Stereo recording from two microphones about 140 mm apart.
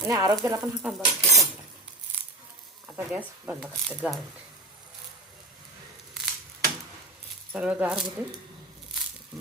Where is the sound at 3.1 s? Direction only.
10° right (ahead or behind).